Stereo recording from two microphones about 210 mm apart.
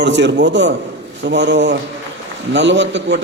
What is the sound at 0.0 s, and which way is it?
A man's voice, 55° right (ahead or behind).